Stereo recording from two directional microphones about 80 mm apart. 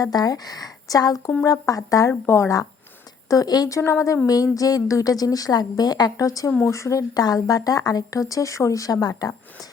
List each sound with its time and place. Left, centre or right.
0.0 s a woman's voice: left
2.2 s a woman's voice: left
3.8 s a woman's voice: left
7.1 s a woman's voice: left